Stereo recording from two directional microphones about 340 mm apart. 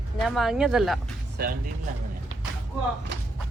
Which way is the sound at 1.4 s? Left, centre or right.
Right.